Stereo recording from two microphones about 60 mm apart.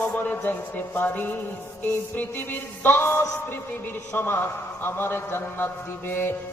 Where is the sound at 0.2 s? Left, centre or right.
Left.